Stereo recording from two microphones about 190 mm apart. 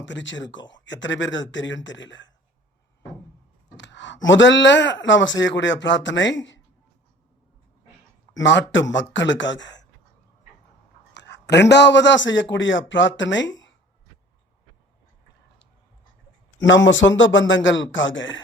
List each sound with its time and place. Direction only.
0.0 s speech: 70° left (ahead or behind)
3.8 s speech: 70° left (ahead or behind)
8.3 s speech: 75° left (ahead or behind)
11.1 s a man's voice: 65° left (ahead or behind)
16.6 s a man's voice: 80° left